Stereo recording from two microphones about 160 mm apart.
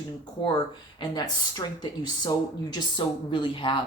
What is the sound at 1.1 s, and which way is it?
Speech, 25° left (ahead or behind).